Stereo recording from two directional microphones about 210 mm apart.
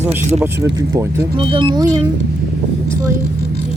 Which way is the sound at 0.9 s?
20° right (ahead or behind).